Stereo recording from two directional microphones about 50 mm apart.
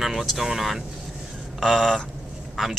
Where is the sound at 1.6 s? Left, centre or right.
Centre.